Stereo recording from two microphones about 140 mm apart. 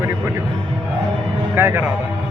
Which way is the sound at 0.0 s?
15° right (ahead or behind).